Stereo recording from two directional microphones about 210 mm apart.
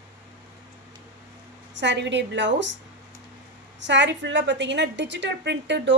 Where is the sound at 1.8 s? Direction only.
55° right (ahead or behind).